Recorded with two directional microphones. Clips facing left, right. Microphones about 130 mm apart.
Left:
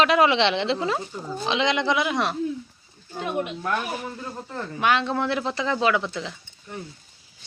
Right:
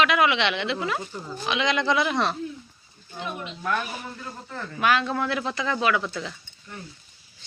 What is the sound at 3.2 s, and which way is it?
Speech, 55° left (ahead or behind).